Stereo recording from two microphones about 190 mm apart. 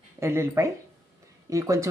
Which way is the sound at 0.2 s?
15° right (ahead or behind).